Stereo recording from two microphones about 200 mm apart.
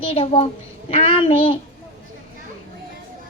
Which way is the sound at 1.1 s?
25° left (ahead or behind).